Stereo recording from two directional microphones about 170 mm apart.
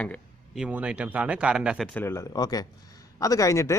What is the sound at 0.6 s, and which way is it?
Speech, 10° right (ahead or behind).